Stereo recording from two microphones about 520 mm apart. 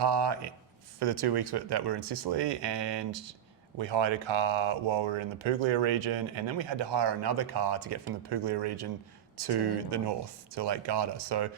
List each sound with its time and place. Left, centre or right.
0.0 s speech: right